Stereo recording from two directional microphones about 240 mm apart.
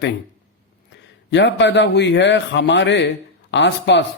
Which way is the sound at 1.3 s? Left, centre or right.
Left.